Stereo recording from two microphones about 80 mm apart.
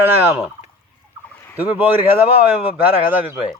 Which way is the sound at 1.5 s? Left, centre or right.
Right.